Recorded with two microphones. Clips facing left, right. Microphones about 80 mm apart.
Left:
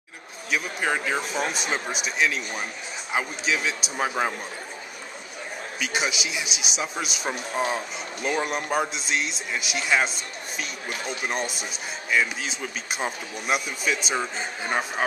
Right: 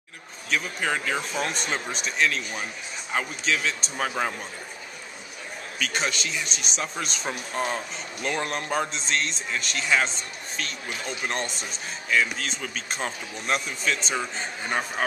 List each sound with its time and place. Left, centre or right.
0.5 s speech: centre
5.8 s speech: centre